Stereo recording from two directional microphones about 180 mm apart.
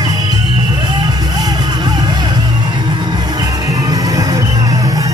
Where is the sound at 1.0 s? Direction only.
20° right (ahead or behind).